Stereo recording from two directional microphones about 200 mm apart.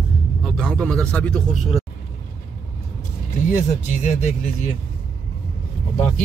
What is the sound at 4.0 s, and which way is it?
Speech, 35° left (ahead or behind).